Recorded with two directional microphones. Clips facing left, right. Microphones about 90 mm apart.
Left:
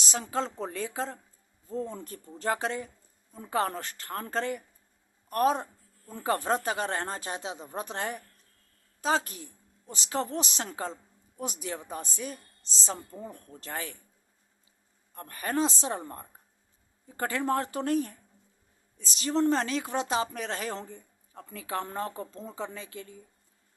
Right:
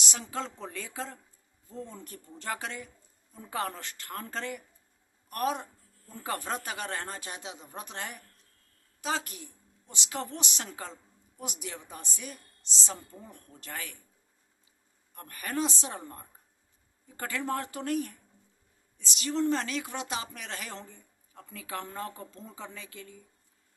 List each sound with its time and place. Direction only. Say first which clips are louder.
0.0 s a woman's voice: left 5 dB; 35° left (ahead or behind)
15.1 s a woman's voice: left 4 dB; 35° left (ahead or behind)